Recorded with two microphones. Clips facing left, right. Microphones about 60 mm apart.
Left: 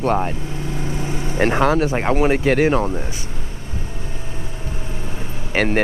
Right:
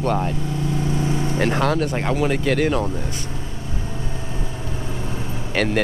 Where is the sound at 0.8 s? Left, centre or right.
Left.